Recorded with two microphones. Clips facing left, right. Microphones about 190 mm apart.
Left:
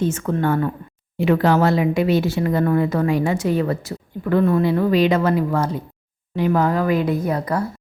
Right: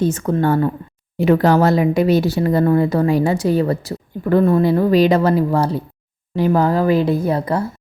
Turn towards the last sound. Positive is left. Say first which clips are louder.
# right 3 dB
turn(degrees=-25)  # may be behind; listen again after turning